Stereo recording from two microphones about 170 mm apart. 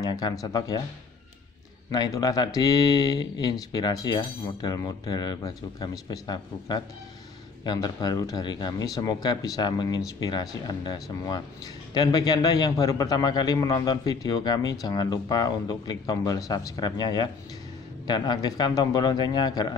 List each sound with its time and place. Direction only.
0.0 s speech: 25° left (ahead or behind)
1.9 s speech: 20° left (ahead or behind)